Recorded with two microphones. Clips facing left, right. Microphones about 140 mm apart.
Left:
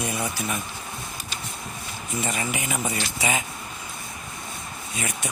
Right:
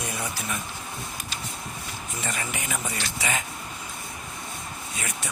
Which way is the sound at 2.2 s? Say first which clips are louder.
Left 5 dB; 10° left (ahead or behind).